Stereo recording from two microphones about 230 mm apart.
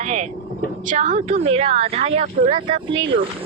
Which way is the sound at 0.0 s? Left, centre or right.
Right.